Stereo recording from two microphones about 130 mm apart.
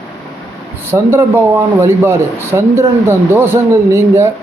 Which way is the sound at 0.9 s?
20° right (ahead or behind).